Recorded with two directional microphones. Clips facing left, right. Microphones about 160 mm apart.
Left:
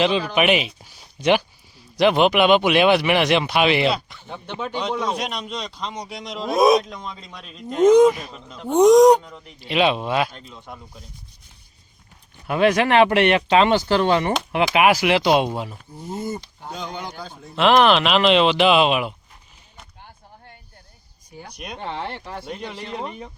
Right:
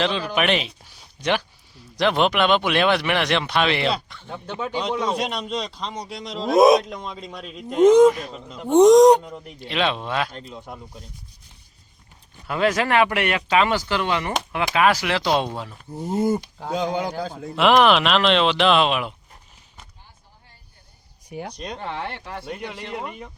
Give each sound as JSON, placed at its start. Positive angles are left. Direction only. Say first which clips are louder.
{"t": 0.0, "sound": "speech", "louder": "left 3 dB", "side_deg": 10}
{"t": 4.4, "sound": "speech", "louder": "even", "side_deg": -5}
{"t": 7.9, "sound": "speech", "louder": "even", "side_deg": 10}
{"t": 9.6, "sound": "speech", "louder": "left 4 dB", "side_deg": 10}
{"t": 10.5, "sound": "speech", "louder": "right 2 dB", "side_deg": -5}
{"t": 12.5, "sound": "speech", "louder": "left 3 dB", "side_deg": 20}
{"t": 14.8, "sound": "speech", "louder": "left 2 dB", "side_deg": 15}
{"t": 16.6, "sound": "speech", "louder": "right 8 dB", "side_deg": -90}
{"t": 17.5, "sound": "speech", "louder": "left 1 dB", "side_deg": 0}
{"t": 21.2, "sound": "speech", "louder": "right 8 dB", "side_deg": -70}
{"t": 21.6, "sound": "speech", "louder": "left 3 dB", "side_deg": 15}
{"t": 22.2, "sound": "speech", "louder": "left 1 dB", "side_deg": 0}
{"t": 22.4, "sound": "speech", "louder": "right 1 dB", "side_deg": 20}